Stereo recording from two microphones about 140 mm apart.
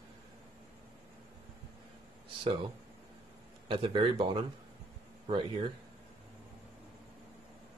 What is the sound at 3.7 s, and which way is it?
Speech, 40° right (ahead or behind).